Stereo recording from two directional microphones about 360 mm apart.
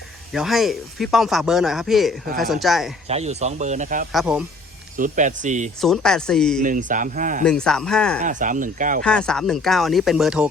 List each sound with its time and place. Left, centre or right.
0.3 s speech: centre
3.1 s speech: centre
4.1 s speech: centre
4.9 s speech: right
5.8 s speech: centre
6.6 s speech: right
7.4 s speech: centre
8.2 s speech: right
9.0 s speech: centre